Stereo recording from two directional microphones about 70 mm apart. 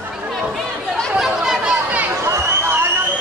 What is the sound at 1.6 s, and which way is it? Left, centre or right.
Chatter, centre.